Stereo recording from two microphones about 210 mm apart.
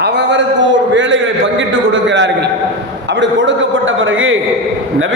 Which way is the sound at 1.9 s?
60° right (ahead or behind).